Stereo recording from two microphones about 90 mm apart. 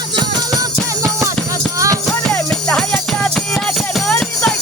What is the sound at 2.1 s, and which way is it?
Music, 15° left (ahead or behind).